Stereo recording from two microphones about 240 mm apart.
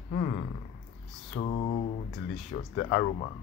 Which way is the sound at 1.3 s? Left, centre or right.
Left.